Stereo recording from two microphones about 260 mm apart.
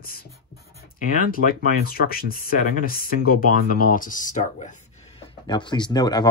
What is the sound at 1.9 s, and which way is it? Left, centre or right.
Speech, left.